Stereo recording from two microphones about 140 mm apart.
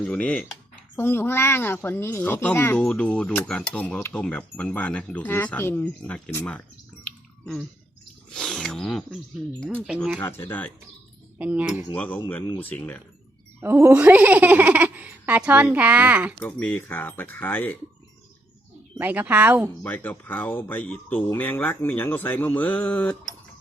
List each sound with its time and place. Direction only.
0.0 s speech: 5° left (ahead or behind)
7.0 s a sound: 5° left (ahead or behind)
9.8 s speech: 5° right (ahead or behind)
10.2 s speech: 15° left (ahead or behind)
11.3 s a woman's voice: 10° right (ahead or behind)
11.9 s speech: 10° left (ahead or behind)
13.6 s speech: 15° right (ahead or behind)
16.4 s speech: 10° left (ahead or behind)
18.9 s a woman's voice: 10° right (ahead or behind)
19.8 s speech: 15° left (ahead or behind)